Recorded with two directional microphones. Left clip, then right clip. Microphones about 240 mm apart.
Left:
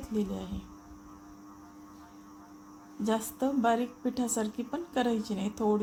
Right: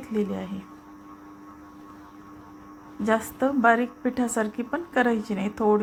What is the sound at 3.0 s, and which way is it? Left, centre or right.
A woman's voice, centre.